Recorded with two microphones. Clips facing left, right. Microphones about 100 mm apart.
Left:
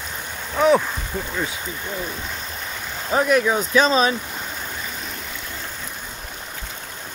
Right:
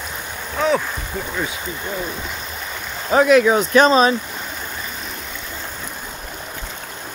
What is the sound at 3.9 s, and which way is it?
Speech, 35° right (ahead or behind).